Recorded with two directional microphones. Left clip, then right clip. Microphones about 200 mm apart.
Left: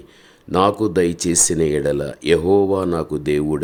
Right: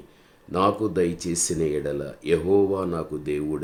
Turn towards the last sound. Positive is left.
turn(degrees=45)  # may be behind; listen again after turning